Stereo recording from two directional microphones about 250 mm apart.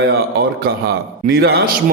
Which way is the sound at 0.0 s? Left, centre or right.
Right.